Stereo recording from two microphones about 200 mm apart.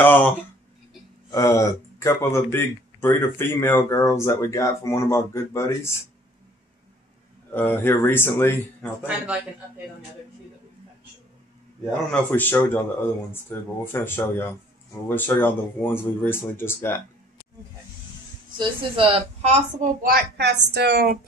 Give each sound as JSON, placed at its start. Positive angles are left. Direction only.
{"t": 0.0, "sound": "a sound", "side_deg": 10}
{"t": 1.3, "sound": "speech", "side_deg": 15}
{"t": 7.5, "sound": "speech", "side_deg": 10}
{"t": 8.8, "sound": "speech", "side_deg": -5}
{"t": 11.8, "sound": "speech", "side_deg": 10}
{"t": 18.6, "sound": "a woman's voice", "side_deg": -25}
{"t": 19.8, "sound": "a woman's voice", "side_deg": -45}